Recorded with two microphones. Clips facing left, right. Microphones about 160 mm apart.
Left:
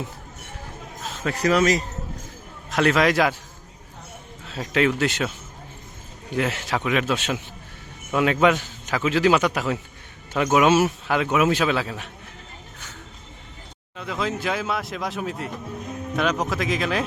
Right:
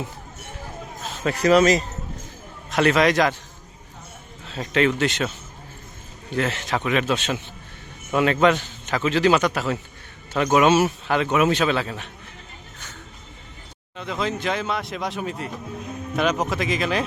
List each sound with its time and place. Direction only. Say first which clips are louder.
1.2 s speech: right 3 dB; 25° right (ahead or behind)
2.6 s a man's voice: right 1 dB; centre (ahead or behind)
4.4 s a man's voice: right 1 dB; 5° left (ahead or behind)
6.3 s a man's voice: even; 10° left (ahead or behind)
13.9 s a man's voice: right 1 dB; centre (ahead or behind)